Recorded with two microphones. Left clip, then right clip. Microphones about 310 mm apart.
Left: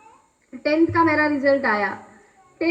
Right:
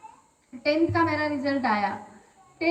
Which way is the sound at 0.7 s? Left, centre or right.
Centre.